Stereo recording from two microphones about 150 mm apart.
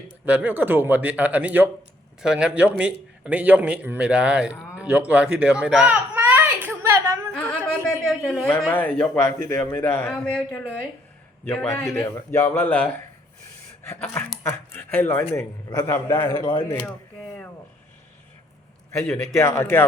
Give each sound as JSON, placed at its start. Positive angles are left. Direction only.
{"t": 0.3, "sound": "a man's voice", "side_deg": -10}
{"t": 7.3, "sound": "a sound", "side_deg": 10}
{"t": 8.6, "sound": "a man's voice", "side_deg": 10}
{"t": 16.5, "sound": "speech", "side_deg": 30}
{"t": 19.3, "sound": "a man's voice", "side_deg": 20}